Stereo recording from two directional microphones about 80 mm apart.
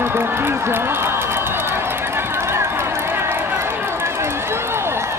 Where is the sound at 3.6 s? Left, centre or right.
Right.